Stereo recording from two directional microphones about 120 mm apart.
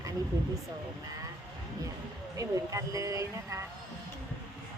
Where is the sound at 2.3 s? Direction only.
30° right (ahead or behind).